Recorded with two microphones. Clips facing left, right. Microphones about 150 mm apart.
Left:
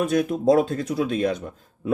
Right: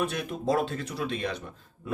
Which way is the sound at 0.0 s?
45° left (ahead or behind).